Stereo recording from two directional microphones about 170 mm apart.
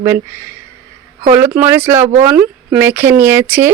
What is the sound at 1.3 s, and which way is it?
Speech, 10° right (ahead or behind).